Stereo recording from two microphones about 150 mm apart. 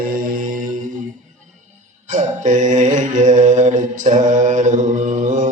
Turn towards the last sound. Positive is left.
turn(degrees=-55)  # may be behind; listen again after turning